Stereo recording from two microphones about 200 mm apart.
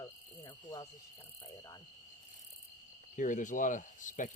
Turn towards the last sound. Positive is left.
turn(degrees=40)  # may be behind; listen again after turning